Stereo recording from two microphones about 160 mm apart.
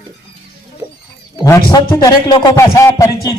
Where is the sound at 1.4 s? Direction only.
25° left (ahead or behind).